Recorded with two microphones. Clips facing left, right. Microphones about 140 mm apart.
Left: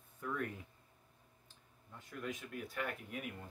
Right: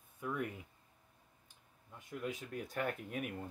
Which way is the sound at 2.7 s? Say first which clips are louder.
Right 5 dB; 45° right (ahead or behind).